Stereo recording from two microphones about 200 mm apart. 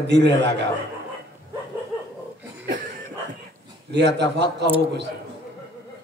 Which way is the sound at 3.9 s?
60° right (ahead or behind).